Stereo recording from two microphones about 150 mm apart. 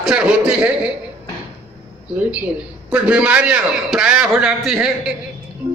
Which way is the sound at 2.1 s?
10° right (ahead or behind).